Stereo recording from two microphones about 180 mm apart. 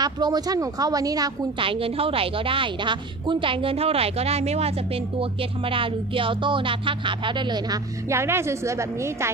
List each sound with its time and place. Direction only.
0.0 s a woman's voice: 20° right (ahead or behind)